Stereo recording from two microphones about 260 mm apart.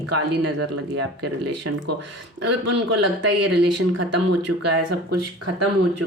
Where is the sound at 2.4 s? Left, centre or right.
Right.